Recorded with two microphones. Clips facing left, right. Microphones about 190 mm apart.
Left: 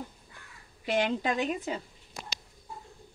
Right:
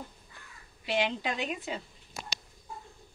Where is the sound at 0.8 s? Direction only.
50° left (ahead or behind).